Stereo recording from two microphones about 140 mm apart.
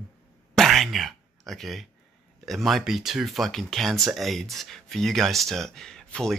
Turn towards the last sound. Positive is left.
turn(degrees=5)  # may be behind; listen again after turning